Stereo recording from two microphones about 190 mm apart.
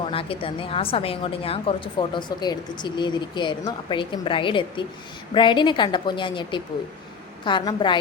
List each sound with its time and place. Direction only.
0.0 s a woman's voice: 30° left (ahead or behind)